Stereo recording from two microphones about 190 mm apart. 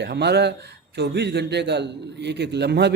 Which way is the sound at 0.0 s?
60° right (ahead or behind).